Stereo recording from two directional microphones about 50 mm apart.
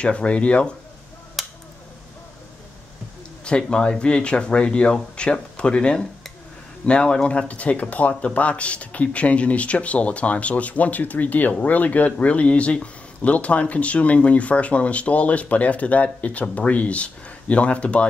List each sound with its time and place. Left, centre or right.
0.0 s speech: left
1.4 s a sound: centre
3.4 s speech: centre